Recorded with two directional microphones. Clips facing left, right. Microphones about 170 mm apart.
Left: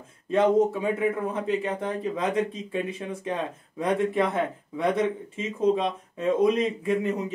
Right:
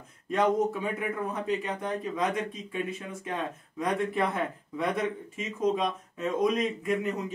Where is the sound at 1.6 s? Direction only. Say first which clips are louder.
Left 4 dB; 30° left (ahead or behind).